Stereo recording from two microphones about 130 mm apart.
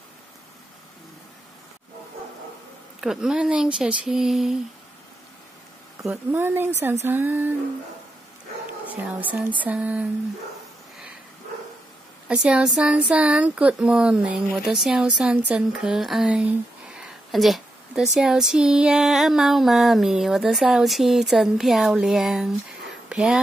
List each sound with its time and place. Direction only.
3.0 s speech: 5° right (ahead or behind)
6.0 s speech: 15° right (ahead or behind)
8.9 s speech: 10° right (ahead or behind)
12.3 s speech: 5° right (ahead or behind)